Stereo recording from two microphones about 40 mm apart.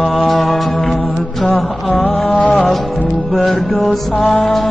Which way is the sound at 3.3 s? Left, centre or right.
Centre.